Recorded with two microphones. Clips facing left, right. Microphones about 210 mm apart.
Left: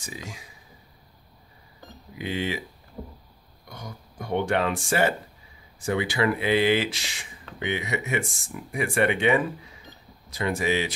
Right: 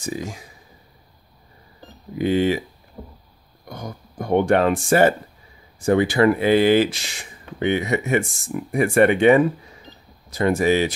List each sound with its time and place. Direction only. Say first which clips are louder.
0.0 s speech: right 10 dB; 45° right (ahead or behind)
2.1 s speech: right 10 dB; 45° right (ahead or behind)
3.6 s speech: right 7 dB; 45° right (ahead or behind)
9.9 s cash register: right 4 dB; 25° right (ahead or behind)
10.3 s speech: right 7 dB; 45° right (ahead or behind)